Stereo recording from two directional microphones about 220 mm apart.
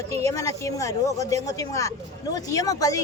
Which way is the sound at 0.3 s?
15° left (ahead or behind).